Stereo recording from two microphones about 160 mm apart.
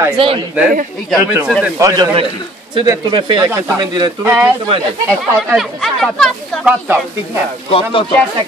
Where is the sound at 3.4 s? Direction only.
20° right (ahead or behind).